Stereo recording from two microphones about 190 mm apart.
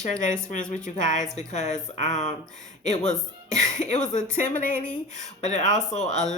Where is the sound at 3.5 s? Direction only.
40° left (ahead or behind).